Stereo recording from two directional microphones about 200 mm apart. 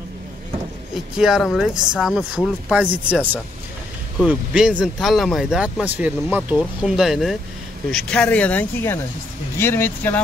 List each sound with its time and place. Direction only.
0.9 s speech: centre (ahead or behind)